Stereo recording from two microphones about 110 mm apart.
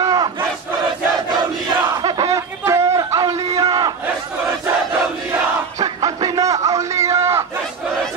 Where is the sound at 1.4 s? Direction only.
45° right (ahead or behind); by 2.8 s 25° right (ahead or behind).